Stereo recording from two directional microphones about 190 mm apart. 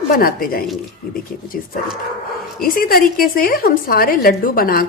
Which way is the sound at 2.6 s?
50° left (ahead or behind).